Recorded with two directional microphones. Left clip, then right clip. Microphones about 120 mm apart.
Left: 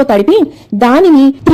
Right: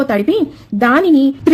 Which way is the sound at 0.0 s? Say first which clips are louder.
Left 6 dB; 30° left (ahead or behind).